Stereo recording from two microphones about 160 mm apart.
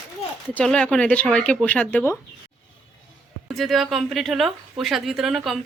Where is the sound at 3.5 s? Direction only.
Centre (ahead or behind).